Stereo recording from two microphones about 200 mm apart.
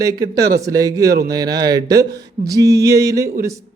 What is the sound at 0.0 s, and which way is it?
A man's voice, 15° right (ahead or behind).